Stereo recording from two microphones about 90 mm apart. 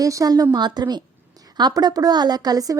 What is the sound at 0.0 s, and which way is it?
Speech, 40° right (ahead or behind).